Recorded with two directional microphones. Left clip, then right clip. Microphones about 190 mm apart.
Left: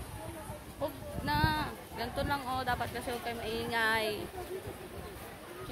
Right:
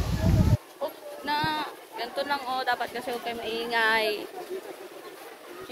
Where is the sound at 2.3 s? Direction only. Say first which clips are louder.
Right 6 dB; 5° left (ahead or behind).